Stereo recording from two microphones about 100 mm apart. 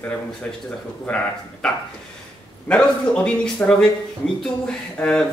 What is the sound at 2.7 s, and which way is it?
Speech, 10° left (ahead or behind).